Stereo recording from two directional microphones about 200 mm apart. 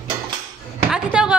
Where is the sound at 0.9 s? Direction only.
5° right (ahead or behind).